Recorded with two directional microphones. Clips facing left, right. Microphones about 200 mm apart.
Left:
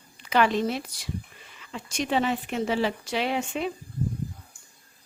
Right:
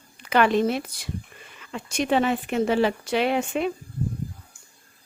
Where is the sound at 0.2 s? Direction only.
55° right (ahead or behind).